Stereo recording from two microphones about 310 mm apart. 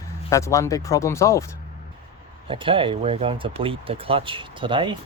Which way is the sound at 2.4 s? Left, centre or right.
Centre.